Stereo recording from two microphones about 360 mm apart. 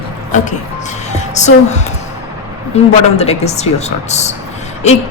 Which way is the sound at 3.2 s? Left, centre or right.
Centre.